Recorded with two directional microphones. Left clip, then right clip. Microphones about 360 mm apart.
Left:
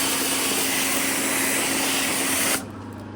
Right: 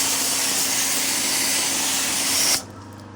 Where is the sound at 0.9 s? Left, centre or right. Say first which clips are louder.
Right 1 dB; centre.